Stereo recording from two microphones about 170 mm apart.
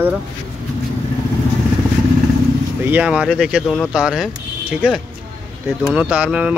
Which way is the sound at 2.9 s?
10° right (ahead or behind).